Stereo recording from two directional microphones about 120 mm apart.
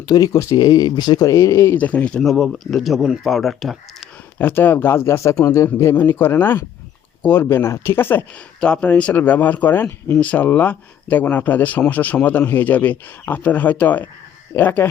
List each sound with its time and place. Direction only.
0.0 s speech: 30° left (ahead or behind); by 3.8 s centre (ahead or behind)
4.4 s speech: 15° left (ahead or behind)